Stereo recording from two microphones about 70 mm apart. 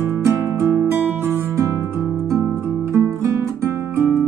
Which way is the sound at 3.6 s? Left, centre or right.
Right.